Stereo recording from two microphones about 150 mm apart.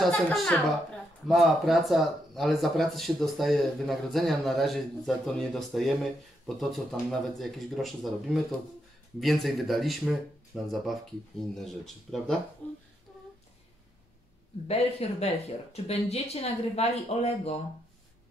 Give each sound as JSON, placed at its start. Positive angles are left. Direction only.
{"t": 0.0, "sound": "speech", "side_deg": 0}
{"t": 14.7, "sound": "speech", "side_deg": 45}